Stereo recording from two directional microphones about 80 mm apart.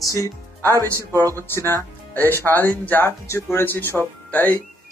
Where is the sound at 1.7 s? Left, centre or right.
Left.